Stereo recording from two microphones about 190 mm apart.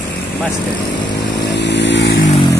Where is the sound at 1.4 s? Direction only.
65° left (ahead or behind).